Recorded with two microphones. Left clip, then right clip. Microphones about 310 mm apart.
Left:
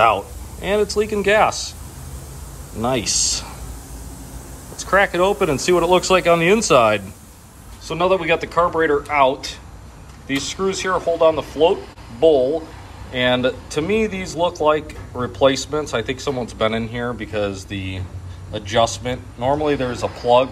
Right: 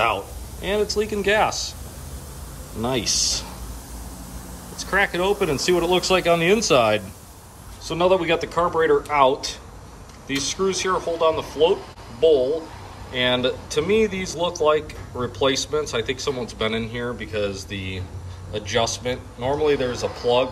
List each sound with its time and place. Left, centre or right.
0.0 s speech: centre
2.8 s speech: centre
4.7 s speech: centre
13.1 s speech: centre
17.6 s speech: right
18.7 s speech: centre